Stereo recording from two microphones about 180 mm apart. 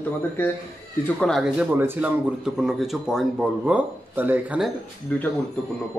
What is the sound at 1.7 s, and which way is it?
Speech, 10° right (ahead or behind).